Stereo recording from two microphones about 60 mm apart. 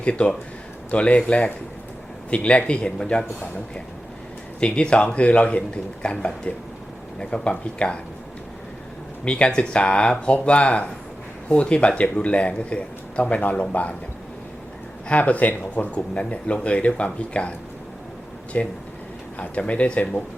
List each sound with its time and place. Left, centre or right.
0.0 s speech: centre
4.6 s speech: centre
9.2 s speech: centre
15.1 s speech: left
18.5 s speech: left